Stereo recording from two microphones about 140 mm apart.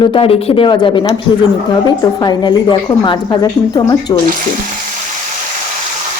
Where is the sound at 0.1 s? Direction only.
45° left (ahead or behind).